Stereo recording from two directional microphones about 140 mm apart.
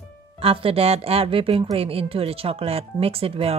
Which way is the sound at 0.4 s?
40° right (ahead or behind).